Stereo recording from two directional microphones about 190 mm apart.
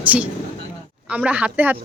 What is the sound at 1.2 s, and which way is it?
Speech, 5° right (ahead or behind).